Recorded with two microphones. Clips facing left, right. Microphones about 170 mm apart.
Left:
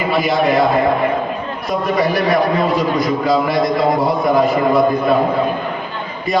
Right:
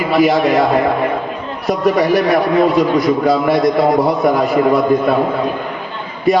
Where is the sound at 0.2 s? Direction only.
70° right (ahead or behind).